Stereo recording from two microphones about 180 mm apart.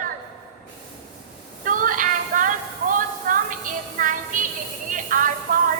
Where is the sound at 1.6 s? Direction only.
50° right (ahead or behind).